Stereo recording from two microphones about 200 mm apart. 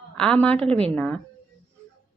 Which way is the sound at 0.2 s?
5° left (ahead or behind).